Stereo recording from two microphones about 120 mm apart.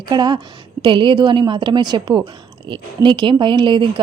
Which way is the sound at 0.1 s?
40° right (ahead or behind).